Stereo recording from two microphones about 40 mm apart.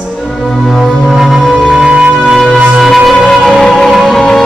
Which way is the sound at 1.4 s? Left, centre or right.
Centre.